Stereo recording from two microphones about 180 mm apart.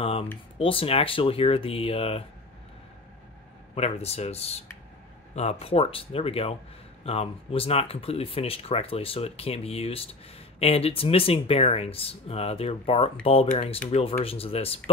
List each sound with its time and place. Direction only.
0.0 s speech: 30° left (ahead or behind)
3.7 s speech: 35° left (ahead or behind)